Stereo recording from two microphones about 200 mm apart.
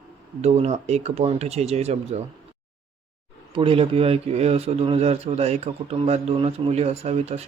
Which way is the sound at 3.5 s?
25° right (ahead or behind).